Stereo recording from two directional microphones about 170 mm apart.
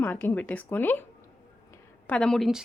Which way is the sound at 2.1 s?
5° left (ahead or behind).